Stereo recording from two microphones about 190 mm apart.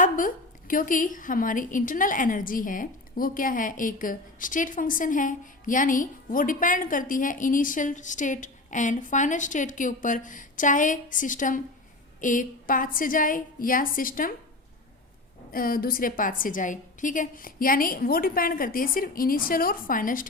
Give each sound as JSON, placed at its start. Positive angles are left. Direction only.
{"t": 0.0, "sound": "a woman's voice", "side_deg": 45}
{"t": 15.5, "sound": "a woman's voice", "side_deg": 50}